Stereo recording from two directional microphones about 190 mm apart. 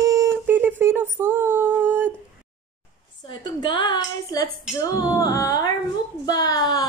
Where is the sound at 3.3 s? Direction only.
25° left (ahead or behind).